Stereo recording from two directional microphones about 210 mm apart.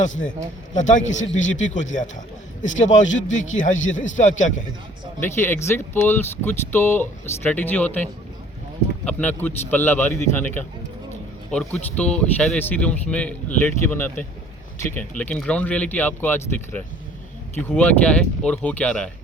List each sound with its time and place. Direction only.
0.7 s a man's voice: 35° left (ahead or behind)
5.2 s speech: 10° left (ahead or behind)